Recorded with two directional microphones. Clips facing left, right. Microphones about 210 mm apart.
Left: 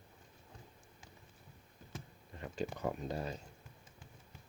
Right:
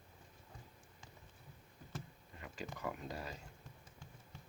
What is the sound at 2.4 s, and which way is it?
Speech, 30° left (ahead or behind).